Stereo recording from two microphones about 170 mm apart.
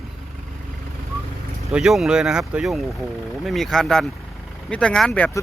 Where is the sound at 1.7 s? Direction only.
5° right (ahead or behind).